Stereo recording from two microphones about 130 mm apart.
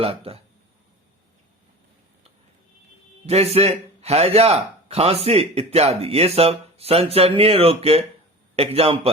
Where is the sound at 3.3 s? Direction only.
50° right (ahead or behind).